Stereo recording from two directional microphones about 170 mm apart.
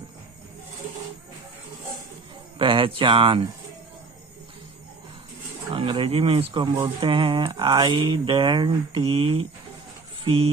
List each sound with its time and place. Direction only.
2.6 s speech: 30° right (ahead or behind)
5.7 s speech: 30° right (ahead or behind)